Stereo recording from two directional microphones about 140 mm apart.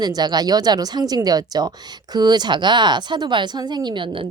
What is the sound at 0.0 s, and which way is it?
A woman's voice, 30° right (ahead or behind).